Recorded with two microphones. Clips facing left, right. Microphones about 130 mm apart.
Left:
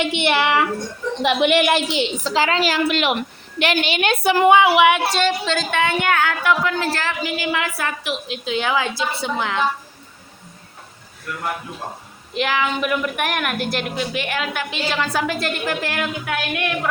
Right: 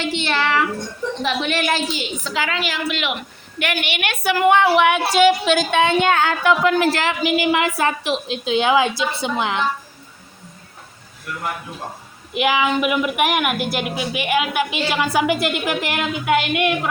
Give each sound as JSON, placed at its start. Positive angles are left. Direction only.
{"t": 0.0, "sound": "a sound", "side_deg": 20}
{"t": 1.4, "sound": "a woman's voice", "side_deg": 15}
{"t": 3.6, "sound": "a woman's voice", "side_deg": 25}
{"t": 4.5, "sound": "a woman's voice", "side_deg": 5}
{"t": 12.3, "sound": "a woman's voice", "side_deg": -10}